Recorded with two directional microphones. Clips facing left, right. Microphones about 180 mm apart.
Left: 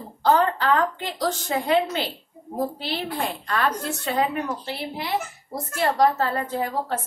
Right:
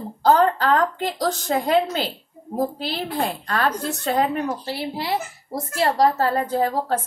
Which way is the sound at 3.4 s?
35° right (ahead or behind).